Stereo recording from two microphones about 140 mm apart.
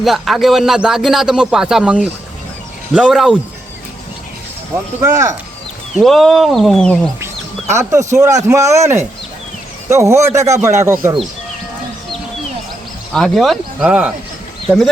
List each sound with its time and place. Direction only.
0.0 s speech: centre (ahead or behind)
4.9 s speech: 20° right (ahead or behind)
6.0 s speech: centre (ahead or behind)
7.7 s speech: 20° right (ahead or behind)
13.1 s speech: centre (ahead or behind)